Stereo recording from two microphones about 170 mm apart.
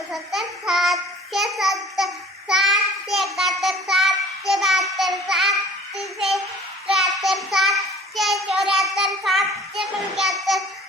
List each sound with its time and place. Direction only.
0.1 s child singing: centre (ahead or behind)
6.8 s child singing: centre (ahead or behind)